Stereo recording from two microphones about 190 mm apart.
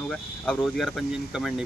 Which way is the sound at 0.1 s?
5° left (ahead or behind).